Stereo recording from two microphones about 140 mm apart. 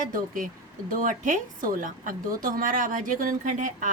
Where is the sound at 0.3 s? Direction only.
70° right (ahead or behind).